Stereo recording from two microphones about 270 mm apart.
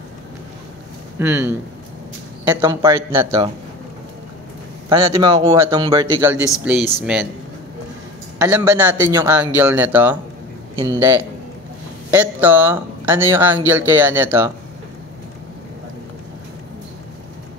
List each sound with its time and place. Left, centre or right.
1.2 s speech: centre
4.8 s speech: centre
8.4 s speech: centre